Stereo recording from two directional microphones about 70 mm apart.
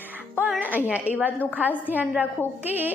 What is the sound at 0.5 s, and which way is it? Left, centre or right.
Speech, right.